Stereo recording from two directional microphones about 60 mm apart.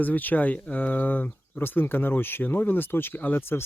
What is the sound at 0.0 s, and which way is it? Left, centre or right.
Speech, left.